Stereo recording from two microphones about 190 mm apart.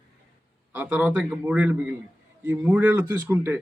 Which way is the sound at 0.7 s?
10° right (ahead or behind).